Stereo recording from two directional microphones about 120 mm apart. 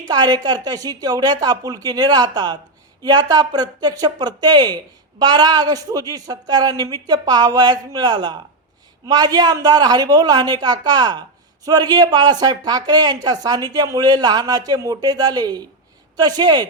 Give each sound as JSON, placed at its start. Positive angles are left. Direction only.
{"t": 0.1, "sound": "a woman's voice", "side_deg": -35}